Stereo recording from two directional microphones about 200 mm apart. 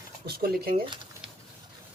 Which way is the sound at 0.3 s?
50° right (ahead or behind).